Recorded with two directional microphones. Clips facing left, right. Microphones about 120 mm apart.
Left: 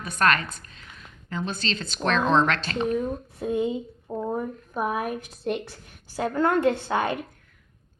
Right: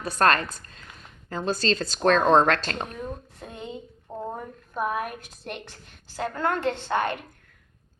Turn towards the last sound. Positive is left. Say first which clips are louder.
# left 2 dB
turn(degrees=10)  # may be behind; listen again after turning